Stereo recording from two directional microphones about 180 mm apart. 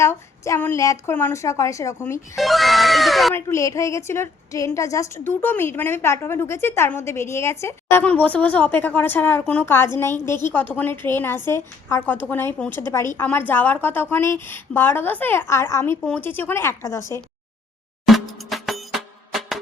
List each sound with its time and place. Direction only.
0.0 s a woman's voice: 15° left (ahead or behind)
2.3 s speech: centre (ahead or behind)
3.3 s a woman's voice: 15° left (ahead or behind)
18.0 s music: centre (ahead or behind)